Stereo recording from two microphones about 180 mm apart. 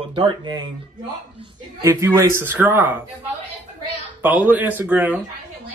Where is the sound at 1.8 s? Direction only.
15° right (ahead or behind).